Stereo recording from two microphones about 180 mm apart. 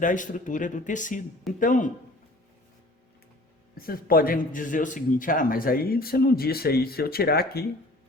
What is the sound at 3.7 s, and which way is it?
A man's voice, 55° left (ahead or behind).